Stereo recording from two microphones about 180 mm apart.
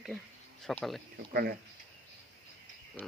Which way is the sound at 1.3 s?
55° right (ahead or behind).